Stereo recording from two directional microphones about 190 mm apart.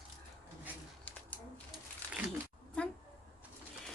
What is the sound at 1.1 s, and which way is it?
Bird, 10° left (ahead or behind).